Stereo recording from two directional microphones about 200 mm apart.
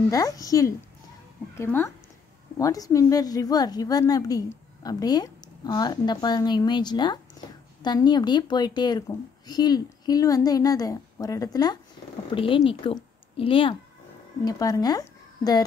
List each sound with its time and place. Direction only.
0.1 s a woman's voice: 15° left (ahead or behind)